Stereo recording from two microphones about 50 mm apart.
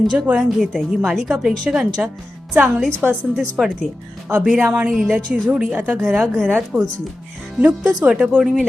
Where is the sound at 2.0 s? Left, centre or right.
Right.